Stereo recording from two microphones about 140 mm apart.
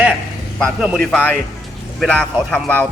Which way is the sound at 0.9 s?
5° left (ahead or behind).